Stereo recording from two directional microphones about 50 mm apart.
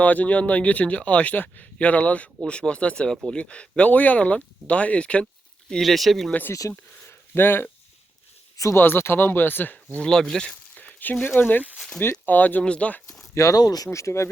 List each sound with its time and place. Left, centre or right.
0.0 s speech: left
5.8 s speech: centre
6.5 s speech: left
7.0 s a sound: left
8.7 s speech: left
10.0 s speech: centre
10.5 s a sound: left
11.3 s speech: left
13.4 s speech: left
13.9 s speech: left